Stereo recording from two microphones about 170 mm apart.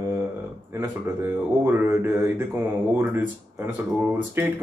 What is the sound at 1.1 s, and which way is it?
Speech, 15° right (ahead or behind).